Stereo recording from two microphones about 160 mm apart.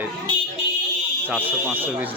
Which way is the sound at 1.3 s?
10° right (ahead or behind).